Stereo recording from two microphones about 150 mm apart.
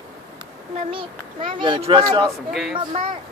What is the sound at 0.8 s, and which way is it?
A child's voice, 35° right (ahead or behind).